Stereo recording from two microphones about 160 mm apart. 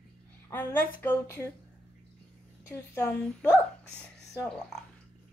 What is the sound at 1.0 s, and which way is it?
Speech, 15° left (ahead or behind).